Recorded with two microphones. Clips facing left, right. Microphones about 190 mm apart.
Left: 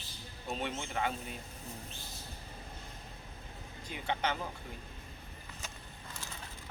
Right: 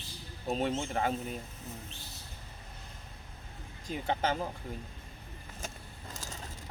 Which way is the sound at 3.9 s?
40° right (ahead or behind).